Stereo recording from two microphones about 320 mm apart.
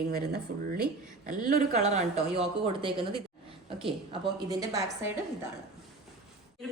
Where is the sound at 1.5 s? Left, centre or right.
Right.